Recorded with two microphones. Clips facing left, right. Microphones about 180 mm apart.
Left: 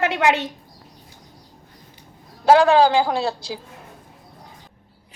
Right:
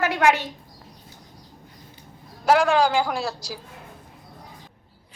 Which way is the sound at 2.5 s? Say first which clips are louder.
Left 5 dB; 30° left (ahead or behind).